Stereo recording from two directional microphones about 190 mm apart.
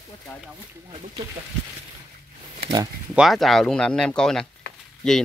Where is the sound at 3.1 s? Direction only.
Centre (ahead or behind).